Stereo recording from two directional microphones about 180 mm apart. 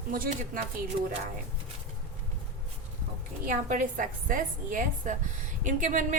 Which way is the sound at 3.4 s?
50° right (ahead or behind).